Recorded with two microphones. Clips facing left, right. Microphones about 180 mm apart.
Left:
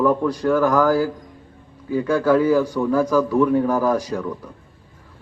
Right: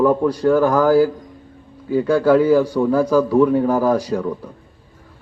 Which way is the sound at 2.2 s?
10° right (ahead or behind).